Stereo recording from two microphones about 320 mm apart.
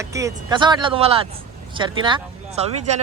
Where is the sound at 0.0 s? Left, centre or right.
Centre.